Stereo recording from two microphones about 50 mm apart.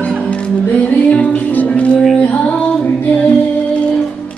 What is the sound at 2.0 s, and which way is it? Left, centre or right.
Music, centre.